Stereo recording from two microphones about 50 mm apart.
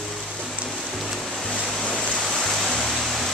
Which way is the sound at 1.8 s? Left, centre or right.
Centre.